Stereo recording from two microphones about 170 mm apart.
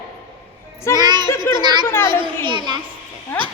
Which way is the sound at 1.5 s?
25° right (ahead or behind).